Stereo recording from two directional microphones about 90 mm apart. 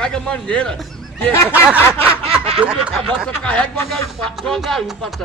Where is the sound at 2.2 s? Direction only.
90° right.